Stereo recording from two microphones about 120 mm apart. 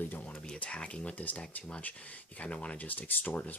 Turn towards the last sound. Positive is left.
turn(degrees=15)  # may be behind; listen again after turning